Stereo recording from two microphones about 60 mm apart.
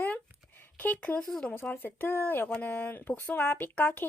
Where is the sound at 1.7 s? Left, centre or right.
Left.